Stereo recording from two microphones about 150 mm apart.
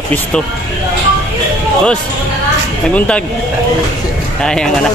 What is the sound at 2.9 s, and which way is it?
Speech, 5° left (ahead or behind).